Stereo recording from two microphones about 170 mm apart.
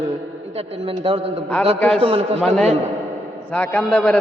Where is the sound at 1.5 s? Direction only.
5° left (ahead or behind).